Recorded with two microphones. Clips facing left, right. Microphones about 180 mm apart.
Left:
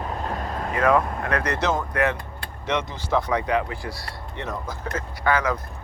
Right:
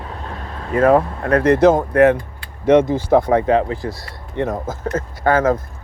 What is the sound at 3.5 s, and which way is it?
Speech, 35° right (ahead or behind).